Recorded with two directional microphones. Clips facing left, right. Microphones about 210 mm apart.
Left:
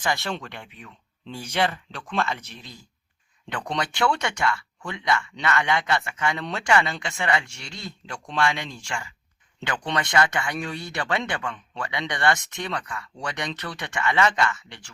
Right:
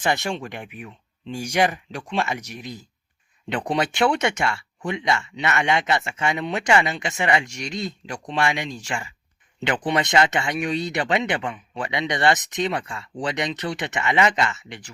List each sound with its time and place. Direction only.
0.0 s speech: 20° right (ahead or behind)